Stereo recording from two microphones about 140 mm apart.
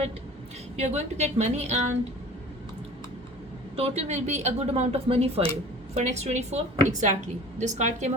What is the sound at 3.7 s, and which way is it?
A woman's voice, 45° right (ahead or behind).